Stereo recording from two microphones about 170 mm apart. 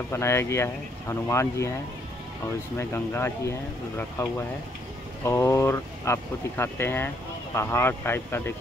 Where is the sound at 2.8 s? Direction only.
15° left (ahead or behind).